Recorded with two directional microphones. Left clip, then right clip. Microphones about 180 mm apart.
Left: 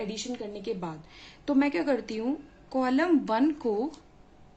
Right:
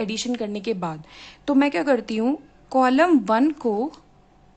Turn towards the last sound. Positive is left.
turn(degrees=-35)  # may be behind; listen again after turning